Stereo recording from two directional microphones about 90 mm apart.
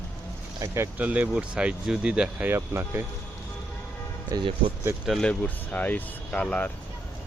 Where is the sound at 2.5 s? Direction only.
25° right (ahead or behind).